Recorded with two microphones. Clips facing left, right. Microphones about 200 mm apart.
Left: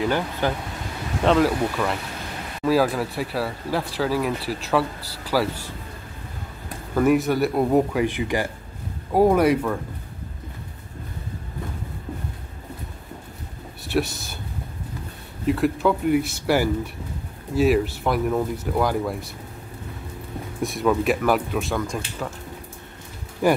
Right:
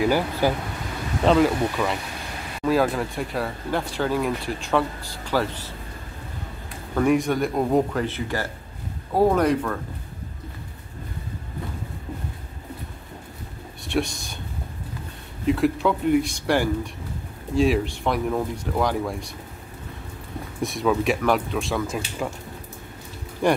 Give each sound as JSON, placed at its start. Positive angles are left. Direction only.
{"t": 0.0, "sound": "speech", "side_deg": -10}
{"t": 7.0, "sound": "speech", "side_deg": 5}
{"t": 13.8, "sound": "speech", "side_deg": 5}
{"t": 15.4, "sound": "speech", "side_deg": 0}
{"t": 20.6, "sound": "speech", "side_deg": 0}
{"t": 23.4, "sound": "speech", "side_deg": 5}